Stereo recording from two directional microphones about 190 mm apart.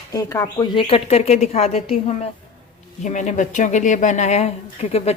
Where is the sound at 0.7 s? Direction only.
30° left (ahead or behind).